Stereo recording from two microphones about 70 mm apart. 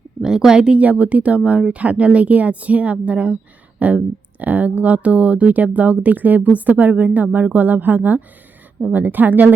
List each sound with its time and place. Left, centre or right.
0.2 s speech: centre; by 9.6 s right